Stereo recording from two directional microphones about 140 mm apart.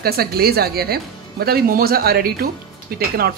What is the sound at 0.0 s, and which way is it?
Speech, 90° right.